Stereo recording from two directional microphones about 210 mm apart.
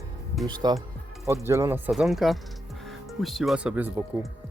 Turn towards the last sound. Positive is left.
turn(degrees=-5)  # may be behind; listen again after turning